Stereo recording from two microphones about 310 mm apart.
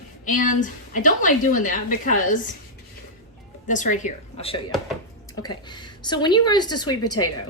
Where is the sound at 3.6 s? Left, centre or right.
Left.